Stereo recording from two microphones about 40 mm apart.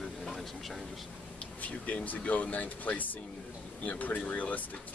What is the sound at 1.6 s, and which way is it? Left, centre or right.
Speech, left.